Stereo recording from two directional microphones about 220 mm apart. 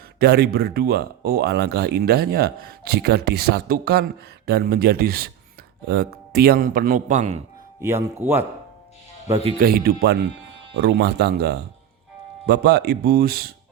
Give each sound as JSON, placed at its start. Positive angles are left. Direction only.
{"t": 0.2, "sound": "a man's voice", "side_deg": -45}
{"t": 7.8, "sound": "speech", "side_deg": -10}
{"t": 9.6, "sound": "speech", "side_deg": -45}